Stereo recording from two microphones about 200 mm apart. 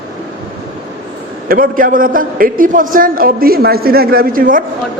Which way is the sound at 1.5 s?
45° right (ahead or behind).